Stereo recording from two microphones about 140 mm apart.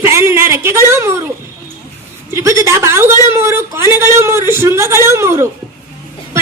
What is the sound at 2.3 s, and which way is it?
A woman's voice, 20° right (ahead or behind).